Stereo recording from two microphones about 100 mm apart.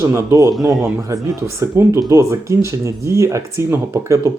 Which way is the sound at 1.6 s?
25° right (ahead or behind).